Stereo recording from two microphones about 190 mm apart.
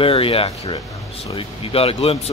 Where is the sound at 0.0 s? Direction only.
30° left (ahead or behind).